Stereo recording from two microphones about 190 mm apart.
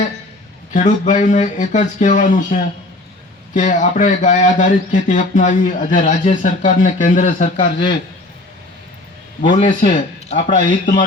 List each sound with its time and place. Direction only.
0.7 s speech: 40° left (ahead or behind)
9.4 s speech: 40° left (ahead or behind)